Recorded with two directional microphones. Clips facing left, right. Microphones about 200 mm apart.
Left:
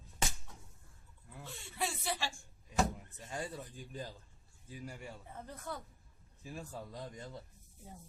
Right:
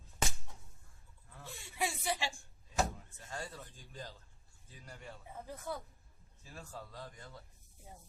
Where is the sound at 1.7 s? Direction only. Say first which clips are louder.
Right 2 dB; 15° right (ahead or behind).